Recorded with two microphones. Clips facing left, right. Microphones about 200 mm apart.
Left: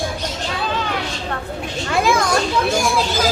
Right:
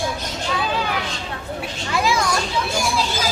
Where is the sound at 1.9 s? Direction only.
50° left (ahead or behind).